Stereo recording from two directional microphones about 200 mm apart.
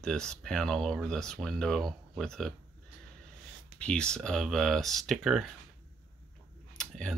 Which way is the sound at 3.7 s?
5° left (ahead or behind).